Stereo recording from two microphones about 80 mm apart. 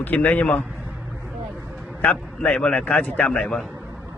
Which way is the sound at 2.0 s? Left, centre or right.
Centre.